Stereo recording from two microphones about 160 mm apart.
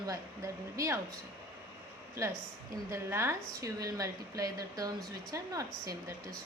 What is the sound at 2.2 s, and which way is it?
A woman's voice, 20° right (ahead or behind).